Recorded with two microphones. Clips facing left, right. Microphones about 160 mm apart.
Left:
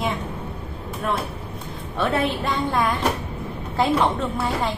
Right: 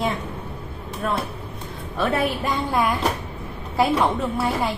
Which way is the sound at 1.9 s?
5° right (ahead or behind).